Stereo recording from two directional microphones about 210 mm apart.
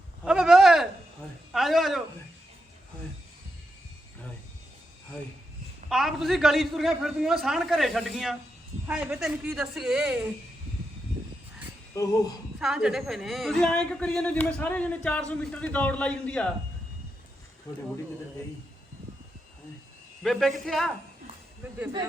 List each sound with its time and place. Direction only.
0.3 s a sound: 5° right (ahead or behind)
1.5 s a woman's voice: centre (ahead or behind)
5.9 s a woman's voice: centre (ahead or behind)
11.9 s speech: 15° left (ahead or behind)
12.5 s a woman's voice: centre (ahead or behind)
17.7 s speech: 15° left (ahead or behind)
20.2 s a woman's voice: centre (ahead or behind)